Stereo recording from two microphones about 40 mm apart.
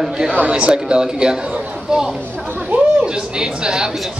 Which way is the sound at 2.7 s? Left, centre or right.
Right.